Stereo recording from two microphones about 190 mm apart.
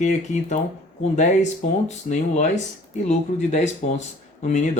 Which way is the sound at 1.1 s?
40° left (ahead or behind).